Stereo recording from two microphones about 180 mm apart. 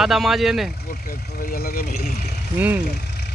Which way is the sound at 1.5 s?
55° left (ahead or behind).